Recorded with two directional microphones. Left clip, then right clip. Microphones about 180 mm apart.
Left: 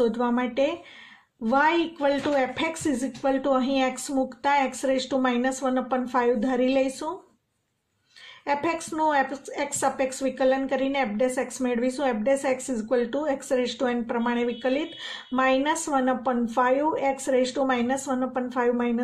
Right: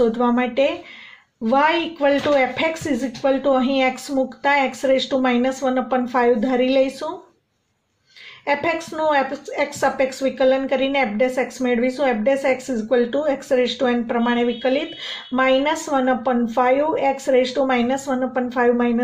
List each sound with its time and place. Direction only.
0.0 s speech: 35° left (ahead or behind)
8.5 s speech: 35° left (ahead or behind)